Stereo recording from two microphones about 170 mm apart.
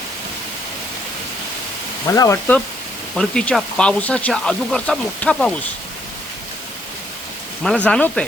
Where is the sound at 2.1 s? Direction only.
20° left (ahead or behind).